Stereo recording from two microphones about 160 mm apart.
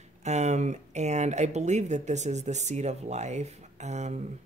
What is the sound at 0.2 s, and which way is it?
Speech, 45° right (ahead or behind).